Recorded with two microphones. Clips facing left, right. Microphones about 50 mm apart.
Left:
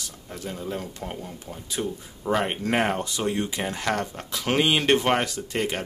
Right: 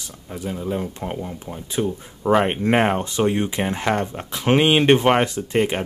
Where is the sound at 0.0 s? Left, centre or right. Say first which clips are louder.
Right 5 dB; centre.